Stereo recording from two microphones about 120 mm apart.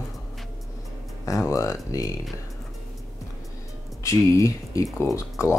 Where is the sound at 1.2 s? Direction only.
30° left (ahead or behind).